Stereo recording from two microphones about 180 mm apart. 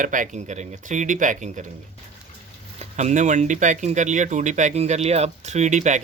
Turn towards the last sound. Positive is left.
turn(degrees=-40)  # may be behind; listen again after turning